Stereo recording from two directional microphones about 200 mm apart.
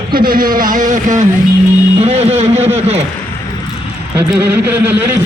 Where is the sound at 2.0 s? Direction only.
30° right (ahead or behind).